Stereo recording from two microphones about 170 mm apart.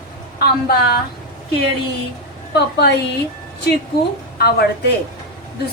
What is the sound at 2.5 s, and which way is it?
Speech, 80° left.